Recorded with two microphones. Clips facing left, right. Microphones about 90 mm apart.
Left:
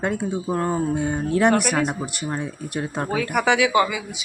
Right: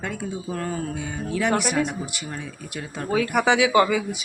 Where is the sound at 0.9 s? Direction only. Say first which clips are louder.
Left 6 dB; 45° left (ahead or behind).